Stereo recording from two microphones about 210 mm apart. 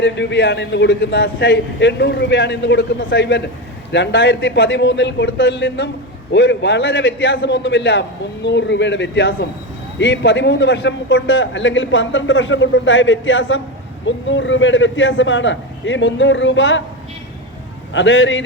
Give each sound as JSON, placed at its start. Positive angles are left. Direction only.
{"t": 0.0, "sound": "a man's voice", "side_deg": 55}
{"t": 17.9, "sound": "a man's voice", "side_deg": 60}